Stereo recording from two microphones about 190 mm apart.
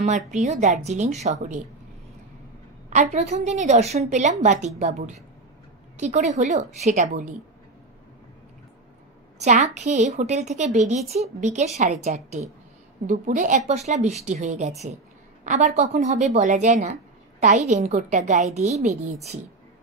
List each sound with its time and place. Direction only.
0.0 s a woman's voice: 40° right (ahead or behind)
2.9 s a woman's voice: 40° right (ahead or behind)
9.4 s a woman's voice: 40° right (ahead or behind)